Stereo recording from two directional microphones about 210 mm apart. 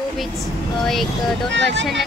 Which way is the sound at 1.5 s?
60° right (ahead or behind).